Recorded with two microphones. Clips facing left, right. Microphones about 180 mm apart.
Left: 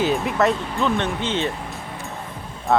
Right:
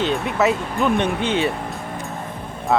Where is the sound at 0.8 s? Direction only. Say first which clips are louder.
Right 5 dB; 15° right (ahead or behind).